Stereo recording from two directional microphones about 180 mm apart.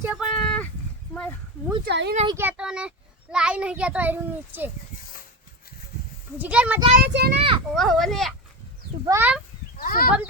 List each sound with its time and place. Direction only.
0.0 s a sound: 5° right (ahead or behind)
1.9 s a child's voice: 70° right (ahead or behind)
2.2 s a child's voice: 15° right (ahead or behind)
6.4 s a child's voice: 10° right (ahead or behind)
6.9 s a child's voice: 65° right (ahead or behind)
7.3 s speech: 30° right (ahead or behind)
7.7 s speech: centre (ahead or behind)
9.0 s a child's voice: 10° right (ahead or behind)
9.7 s speech: 50° left (ahead or behind)